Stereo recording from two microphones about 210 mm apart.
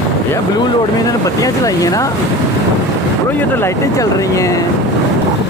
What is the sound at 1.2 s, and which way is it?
Speech, 15° left (ahead or behind).